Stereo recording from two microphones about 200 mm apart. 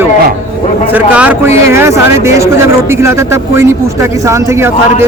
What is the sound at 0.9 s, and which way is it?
Speech, 10° right (ahead or behind).